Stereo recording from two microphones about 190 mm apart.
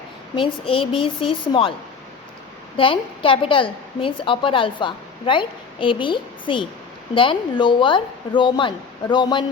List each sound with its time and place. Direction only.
0.7 s a woman's voice: 25° left (ahead or behind)
2.7 s a woman's voice: 25° left (ahead or behind)